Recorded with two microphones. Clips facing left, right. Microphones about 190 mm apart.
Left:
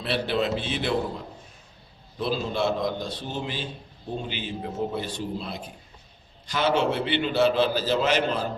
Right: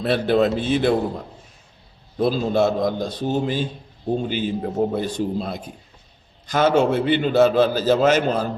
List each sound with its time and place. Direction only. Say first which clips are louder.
0.0 s a man's voice: right 8 dB; 45° right (ahead or behind)
2.1 s a man's voice: right 8 dB; 45° right (ahead or behind)